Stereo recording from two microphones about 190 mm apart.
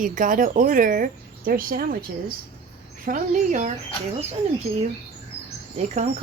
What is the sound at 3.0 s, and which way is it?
Speech, 45° right (ahead or behind).